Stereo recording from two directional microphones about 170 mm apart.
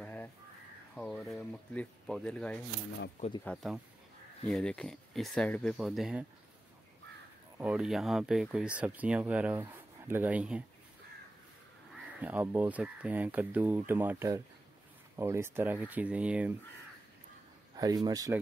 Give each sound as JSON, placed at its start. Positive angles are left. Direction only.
{"t": 0.0, "sound": "crow", "side_deg": 10}
{"t": 0.9, "sound": "speech", "side_deg": 5}
{"t": 7.5, "sound": "speech", "side_deg": -5}
{"t": 11.9, "sound": "speech", "side_deg": -10}
{"t": 17.7, "sound": "speech", "side_deg": -20}